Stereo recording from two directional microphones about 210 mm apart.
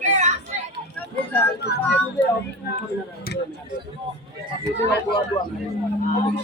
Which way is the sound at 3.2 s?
50° left (ahead or behind).